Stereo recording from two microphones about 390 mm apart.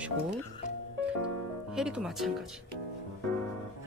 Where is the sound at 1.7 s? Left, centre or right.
Centre.